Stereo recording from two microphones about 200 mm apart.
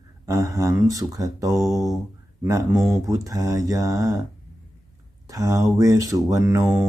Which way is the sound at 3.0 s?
15° right (ahead or behind).